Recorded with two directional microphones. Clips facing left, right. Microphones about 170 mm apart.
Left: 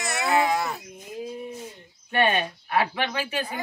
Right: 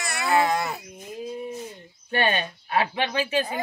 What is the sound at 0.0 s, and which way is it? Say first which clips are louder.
Baby cry: right 1 dB; 20° left (ahead or behind).